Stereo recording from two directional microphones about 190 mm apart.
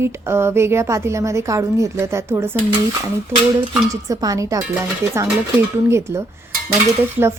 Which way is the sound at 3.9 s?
20° right (ahead or behind).